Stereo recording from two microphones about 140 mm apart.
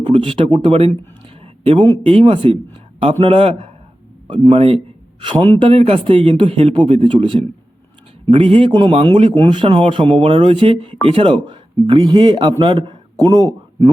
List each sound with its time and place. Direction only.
0.0 s a man's voice: 35° right (ahead or behind)